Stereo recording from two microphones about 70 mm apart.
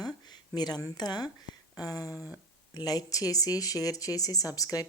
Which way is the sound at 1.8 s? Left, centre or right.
Left.